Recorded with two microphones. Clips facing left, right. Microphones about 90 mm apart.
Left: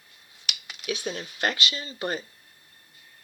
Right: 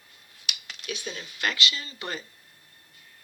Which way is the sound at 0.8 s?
45° left (ahead or behind).